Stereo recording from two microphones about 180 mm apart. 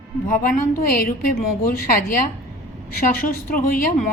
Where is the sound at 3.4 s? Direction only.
50° left (ahead or behind).